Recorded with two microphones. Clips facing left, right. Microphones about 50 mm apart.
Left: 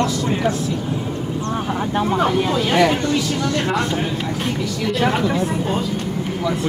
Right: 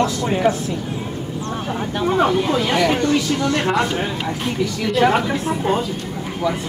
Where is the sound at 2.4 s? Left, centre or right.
Centre.